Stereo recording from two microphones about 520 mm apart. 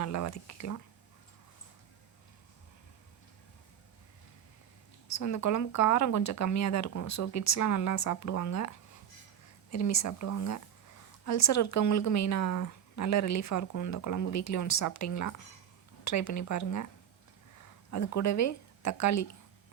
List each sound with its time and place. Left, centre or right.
0.0 s a woman's voice: left
5.0 s a woman's voice: left
17.9 s a woman's voice: left